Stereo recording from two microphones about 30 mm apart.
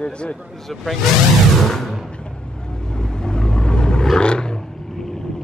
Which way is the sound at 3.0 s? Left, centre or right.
Left.